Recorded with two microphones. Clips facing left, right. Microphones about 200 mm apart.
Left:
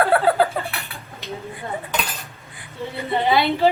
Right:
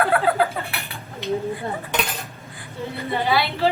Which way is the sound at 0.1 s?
30° left (ahead or behind).